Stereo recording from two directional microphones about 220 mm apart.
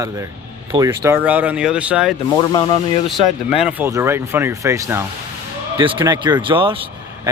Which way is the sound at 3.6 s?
5° right (ahead or behind).